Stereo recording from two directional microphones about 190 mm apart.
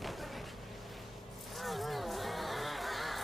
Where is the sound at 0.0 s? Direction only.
Centre (ahead or behind).